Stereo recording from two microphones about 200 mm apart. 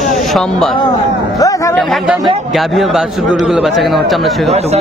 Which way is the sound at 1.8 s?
Centre (ahead or behind).